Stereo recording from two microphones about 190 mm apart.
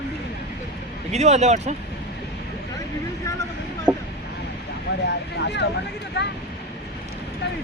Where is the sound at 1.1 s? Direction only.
35° right (ahead or behind).